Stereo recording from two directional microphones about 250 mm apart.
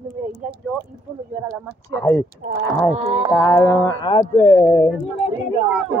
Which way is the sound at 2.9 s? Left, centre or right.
Right.